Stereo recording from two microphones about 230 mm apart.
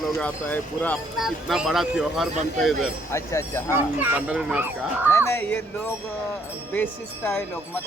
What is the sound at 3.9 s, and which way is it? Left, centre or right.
Speech, centre.